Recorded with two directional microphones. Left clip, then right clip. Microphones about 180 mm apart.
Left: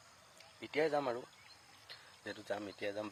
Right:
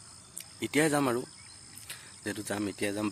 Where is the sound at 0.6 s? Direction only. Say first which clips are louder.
Right 7 dB; 10° right (ahead or behind).